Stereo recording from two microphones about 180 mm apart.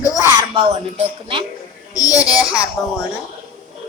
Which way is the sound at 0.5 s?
30° right (ahead or behind).